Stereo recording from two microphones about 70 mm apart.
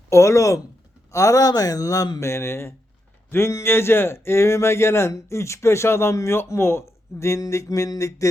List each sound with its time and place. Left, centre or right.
0.1 s speech: left